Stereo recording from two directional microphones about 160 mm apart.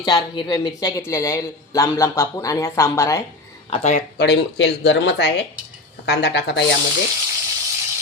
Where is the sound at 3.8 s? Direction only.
50° left (ahead or behind).